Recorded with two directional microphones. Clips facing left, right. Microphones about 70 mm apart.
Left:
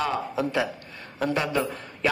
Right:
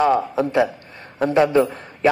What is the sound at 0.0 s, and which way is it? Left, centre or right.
A man's voice, right.